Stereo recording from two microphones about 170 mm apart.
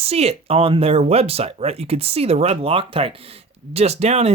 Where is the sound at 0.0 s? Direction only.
35° right (ahead or behind).